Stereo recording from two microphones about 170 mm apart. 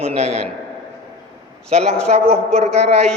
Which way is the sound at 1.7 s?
40° right (ahead or behind).